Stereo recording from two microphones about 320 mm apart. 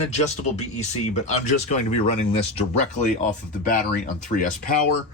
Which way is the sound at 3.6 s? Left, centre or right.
Left.